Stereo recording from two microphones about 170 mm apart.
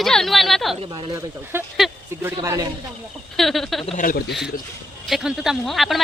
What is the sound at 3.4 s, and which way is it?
Speech, centre (ahead or behind).